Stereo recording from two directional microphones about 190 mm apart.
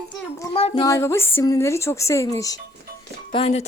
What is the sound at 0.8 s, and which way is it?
A woman's voice, 15° left (ahead or behind).